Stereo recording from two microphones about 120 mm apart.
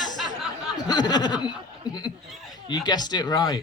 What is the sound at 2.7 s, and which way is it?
Speech, 35° left (ahead or behind).